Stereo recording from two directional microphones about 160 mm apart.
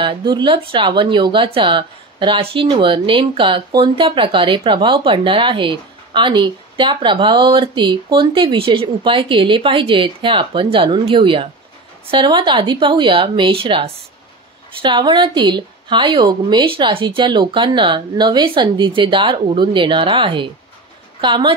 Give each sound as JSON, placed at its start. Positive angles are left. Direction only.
{"t": 0.0, "sound": "speech", "side_deg": -30}